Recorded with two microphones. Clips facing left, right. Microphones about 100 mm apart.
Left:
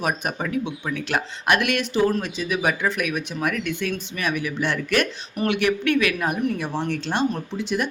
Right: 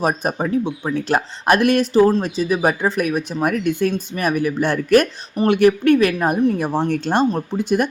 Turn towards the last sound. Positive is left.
turn(degrees=-45)  # may be behind; listen again after turning